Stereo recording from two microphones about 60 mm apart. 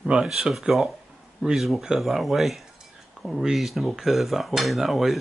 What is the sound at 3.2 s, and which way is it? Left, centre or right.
Cutlery, centre.